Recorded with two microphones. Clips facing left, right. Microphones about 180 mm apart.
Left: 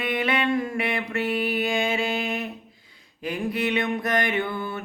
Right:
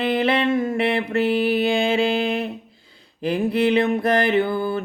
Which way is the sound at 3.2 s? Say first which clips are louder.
Right 7 dB; 30° right (ahead or behind).